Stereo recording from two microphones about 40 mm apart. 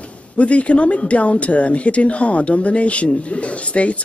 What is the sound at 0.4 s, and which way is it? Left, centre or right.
Speech, left.